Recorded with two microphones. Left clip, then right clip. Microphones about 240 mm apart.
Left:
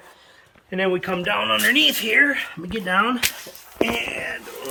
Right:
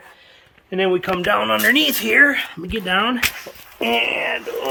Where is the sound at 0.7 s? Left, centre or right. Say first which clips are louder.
Right 3 dB; centre.